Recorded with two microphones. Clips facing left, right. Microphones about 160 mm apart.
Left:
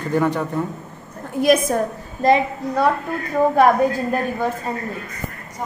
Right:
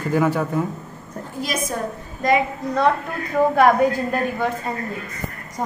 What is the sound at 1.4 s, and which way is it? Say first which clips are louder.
Speech: left 11 dB; 60° left (ahead or behind).